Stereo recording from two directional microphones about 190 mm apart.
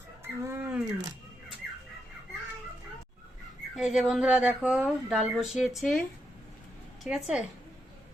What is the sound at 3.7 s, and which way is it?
Speech, 5° right (ahead or behind).